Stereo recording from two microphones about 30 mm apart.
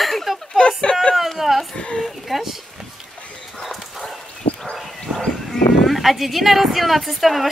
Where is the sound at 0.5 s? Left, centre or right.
Left.